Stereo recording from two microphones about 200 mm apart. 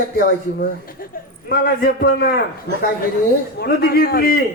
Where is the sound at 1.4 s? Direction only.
50° left (ahead or behind).